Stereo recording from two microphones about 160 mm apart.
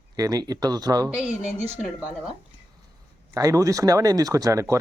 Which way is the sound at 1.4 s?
40° right (ahead or behind).